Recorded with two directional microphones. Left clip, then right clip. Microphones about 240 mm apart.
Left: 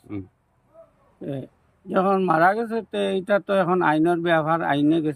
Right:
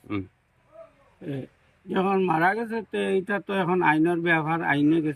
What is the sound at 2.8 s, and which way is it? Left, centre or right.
Speech, centre.